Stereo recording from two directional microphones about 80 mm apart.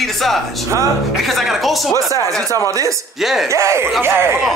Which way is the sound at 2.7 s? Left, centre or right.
Right.